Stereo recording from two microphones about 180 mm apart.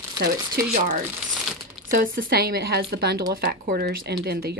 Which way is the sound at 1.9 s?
50° right (ahead or behind).